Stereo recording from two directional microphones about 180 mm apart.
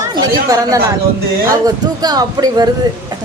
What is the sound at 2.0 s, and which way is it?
Speech, 20° right (ahead or behind).